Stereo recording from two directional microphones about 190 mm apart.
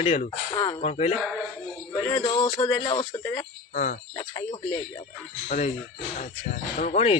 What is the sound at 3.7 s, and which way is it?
Cricket, 40° left (ahead or behind).